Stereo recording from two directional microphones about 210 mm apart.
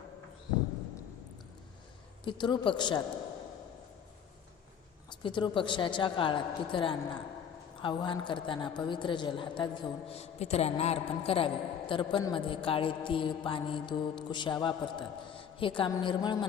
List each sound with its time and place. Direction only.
2.2 s a woman's voice: 20° left (ahead or behind)
5.2 s a woman's voice: 25° left (ahead or behind)